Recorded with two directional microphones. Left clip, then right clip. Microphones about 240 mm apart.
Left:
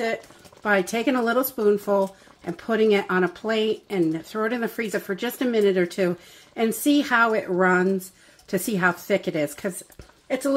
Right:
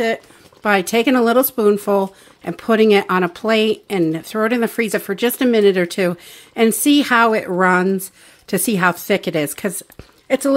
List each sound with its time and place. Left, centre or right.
0.0 s speech: right